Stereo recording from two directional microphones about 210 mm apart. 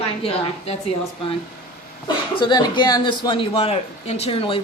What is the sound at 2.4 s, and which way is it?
Speech, 20° left (ahead or behind).